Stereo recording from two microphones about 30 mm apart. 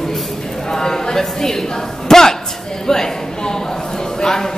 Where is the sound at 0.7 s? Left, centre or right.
Centre.